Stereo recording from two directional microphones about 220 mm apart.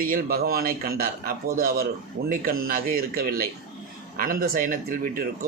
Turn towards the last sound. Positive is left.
turn(degrees=-40)  # may be behind; listen again after turning